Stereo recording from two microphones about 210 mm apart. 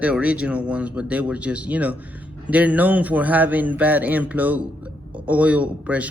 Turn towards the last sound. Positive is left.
turn(degrees=-5)  # may be behind; listen again after turning